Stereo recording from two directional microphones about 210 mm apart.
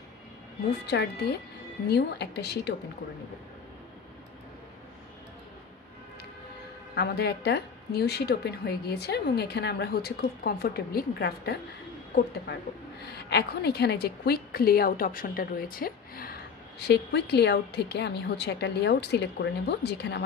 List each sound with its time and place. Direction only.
0.9 s a woman's voice: 50° left (ahead or behind)
7.0 s a woman's voice: 50° left (ahead or behind)
13.0 s a woman's voice: 50° left (ahead or behind)